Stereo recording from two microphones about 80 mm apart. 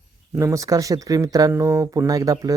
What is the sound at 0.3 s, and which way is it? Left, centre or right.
Speech, right.